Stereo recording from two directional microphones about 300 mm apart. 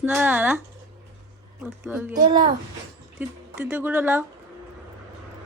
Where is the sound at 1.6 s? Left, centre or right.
Centre.